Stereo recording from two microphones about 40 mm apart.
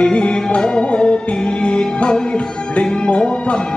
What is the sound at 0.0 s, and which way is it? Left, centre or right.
Music, left.